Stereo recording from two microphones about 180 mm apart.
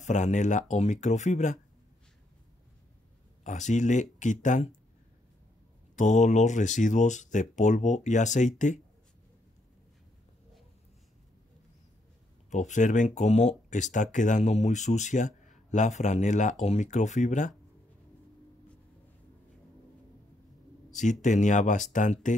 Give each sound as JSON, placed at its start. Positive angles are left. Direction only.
{"t": 0.0, "sound": "speech", "side_deg": 40}
{"t": 3.4, "sound": "speech", "side_deg": 40}
{"t": 5.9, "sound": "speech", "side_deg": 40}
{"t": 12.4, "sound": "speech", "side_deg": 45}
{"t": 20.9, "sound": "speech", "side_deg": 40}